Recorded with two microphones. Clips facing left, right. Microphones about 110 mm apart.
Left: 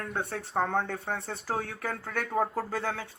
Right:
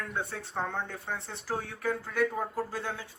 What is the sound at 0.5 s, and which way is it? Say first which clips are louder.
Speech: left 6 dB; 55° left (ahead or behind).